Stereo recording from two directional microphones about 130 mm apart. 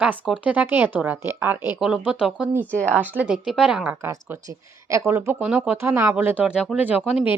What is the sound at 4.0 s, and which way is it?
A woman's voice, 20° right (ahead or behind).